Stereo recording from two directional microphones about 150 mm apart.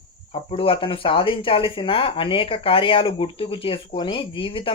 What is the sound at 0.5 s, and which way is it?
Speech, 35° left (ahead or behind).